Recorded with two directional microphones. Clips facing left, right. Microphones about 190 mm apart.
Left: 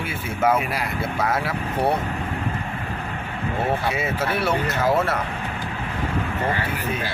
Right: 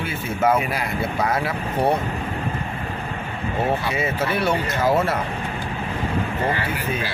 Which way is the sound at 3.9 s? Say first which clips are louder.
Right 1 dB; 5° left (ahead or behind).